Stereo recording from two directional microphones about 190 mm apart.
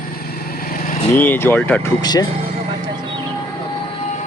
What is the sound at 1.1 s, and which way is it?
Speech, 10° left (ahead or behind).